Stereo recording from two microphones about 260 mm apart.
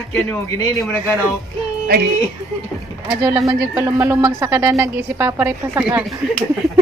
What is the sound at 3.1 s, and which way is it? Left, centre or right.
Speech, centre.